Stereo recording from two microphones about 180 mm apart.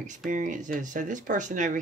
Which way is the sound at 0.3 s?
45° right (ahead or behind).